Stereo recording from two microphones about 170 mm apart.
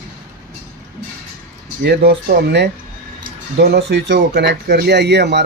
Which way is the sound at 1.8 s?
70° right (ahead or behind).